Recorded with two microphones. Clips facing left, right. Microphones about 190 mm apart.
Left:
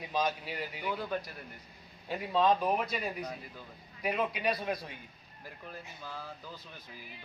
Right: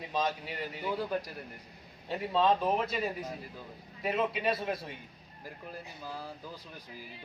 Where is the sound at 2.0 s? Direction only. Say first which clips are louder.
Even; centre (ahead or behind).